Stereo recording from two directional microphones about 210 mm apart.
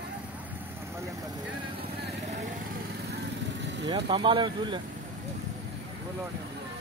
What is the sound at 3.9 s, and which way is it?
Speech, 25° right (ahead or behind).